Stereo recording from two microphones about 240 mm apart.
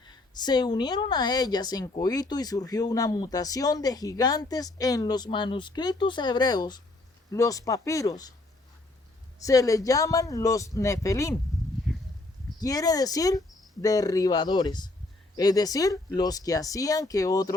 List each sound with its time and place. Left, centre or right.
0.0 s a woman's voice: centre
9.4 s a woman's voice: centre
12.5 s a woman's voice: centre